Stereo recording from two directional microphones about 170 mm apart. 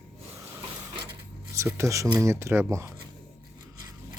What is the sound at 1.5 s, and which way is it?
Speech, 15° right (ahead or behind).